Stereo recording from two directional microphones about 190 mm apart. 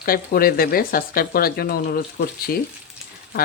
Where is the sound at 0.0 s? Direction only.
50° left (ahead or behind).